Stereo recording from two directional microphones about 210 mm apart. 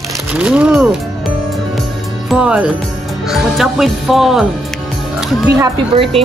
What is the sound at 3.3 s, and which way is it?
Speech, centre (ahead or behind).